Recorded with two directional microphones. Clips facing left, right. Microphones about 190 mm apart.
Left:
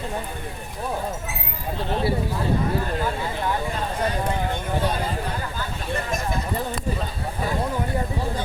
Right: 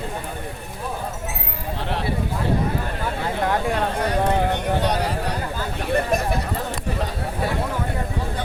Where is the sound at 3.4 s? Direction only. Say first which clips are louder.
Right 4 dB; 70° right (ahead or behind).